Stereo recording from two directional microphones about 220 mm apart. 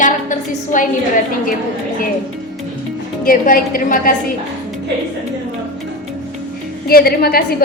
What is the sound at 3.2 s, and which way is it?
Speech, 40° left (ahead or behind).